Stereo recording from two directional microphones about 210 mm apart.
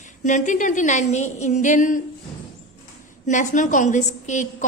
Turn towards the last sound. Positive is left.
turn(degrees=35)  # may be behind; listen again after turning